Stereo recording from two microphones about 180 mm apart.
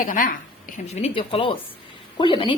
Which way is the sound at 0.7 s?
35° left (ahead or behind).